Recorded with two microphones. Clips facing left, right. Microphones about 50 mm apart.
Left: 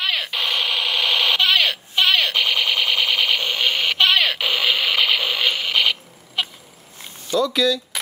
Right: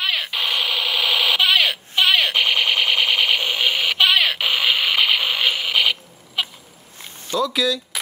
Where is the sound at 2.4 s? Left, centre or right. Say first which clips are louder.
Right 1 dB; right.